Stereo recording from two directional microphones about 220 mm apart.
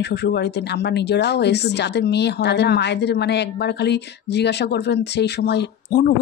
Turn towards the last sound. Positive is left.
turn(degrees=45)  # may be behind; listen again after turning